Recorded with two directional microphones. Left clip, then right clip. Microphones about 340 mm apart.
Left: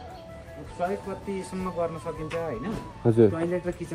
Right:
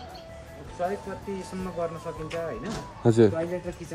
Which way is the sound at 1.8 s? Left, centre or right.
Centre.